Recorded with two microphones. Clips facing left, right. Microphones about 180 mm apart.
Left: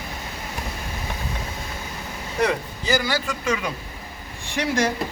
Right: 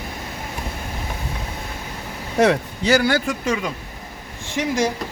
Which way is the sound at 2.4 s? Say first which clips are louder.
Right 6 dB; 75° right (ahead or behind).